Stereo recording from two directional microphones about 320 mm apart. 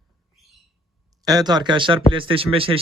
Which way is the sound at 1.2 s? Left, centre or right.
Centre.